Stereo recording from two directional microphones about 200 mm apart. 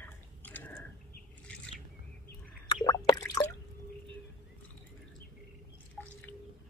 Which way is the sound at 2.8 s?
20° left (ahead or behind).